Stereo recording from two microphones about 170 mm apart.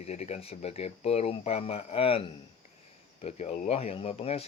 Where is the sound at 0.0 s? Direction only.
40° left (ahead or behind).